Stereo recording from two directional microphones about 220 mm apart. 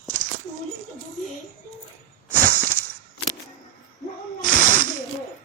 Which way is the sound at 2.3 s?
5° left (ahead or behind).